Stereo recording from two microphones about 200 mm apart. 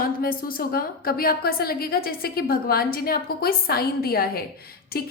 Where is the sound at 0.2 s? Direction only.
45° left (ahead or behind).